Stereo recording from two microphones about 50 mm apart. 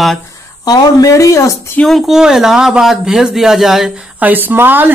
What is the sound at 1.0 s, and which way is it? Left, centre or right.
Speech, left.